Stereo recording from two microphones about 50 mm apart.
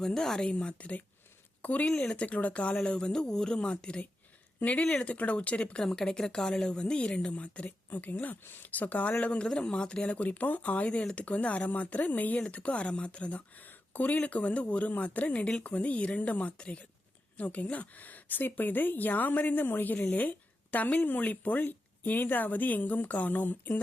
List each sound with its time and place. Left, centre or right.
0.0 s a woman's voice: centre; by 4.9 s left
4.9 s speech: centre
5.1 s speech: left
5.8 s speech: centre; by 9.1 s left
9.2 s a woman's voice: centre